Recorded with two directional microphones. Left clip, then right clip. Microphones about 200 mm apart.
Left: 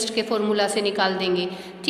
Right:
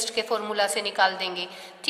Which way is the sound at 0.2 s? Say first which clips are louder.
Left 3 dB; 30° right (ahead or behind).